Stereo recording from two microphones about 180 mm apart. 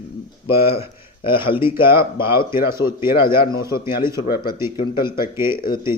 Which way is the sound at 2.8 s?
15° right (ahead or behind).